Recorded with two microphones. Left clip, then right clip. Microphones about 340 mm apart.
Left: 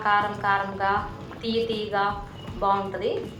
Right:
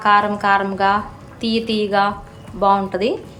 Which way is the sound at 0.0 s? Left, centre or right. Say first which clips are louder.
Right 8 dB; right.